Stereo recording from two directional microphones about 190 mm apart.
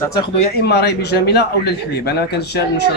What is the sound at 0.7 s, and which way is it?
Speech, 60° left (ahead or behind).